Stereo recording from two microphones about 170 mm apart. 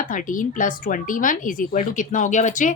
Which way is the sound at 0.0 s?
50° left (ahead or behind).